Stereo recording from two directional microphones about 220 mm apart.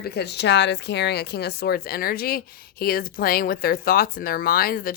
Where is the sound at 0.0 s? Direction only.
45° left (ahead or behind).